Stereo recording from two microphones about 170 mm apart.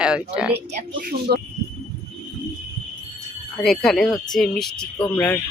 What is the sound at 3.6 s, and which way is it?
Speech, centre (ahead or behind).